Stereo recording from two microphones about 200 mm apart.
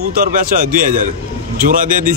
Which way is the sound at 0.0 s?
45° right (ahead or behind).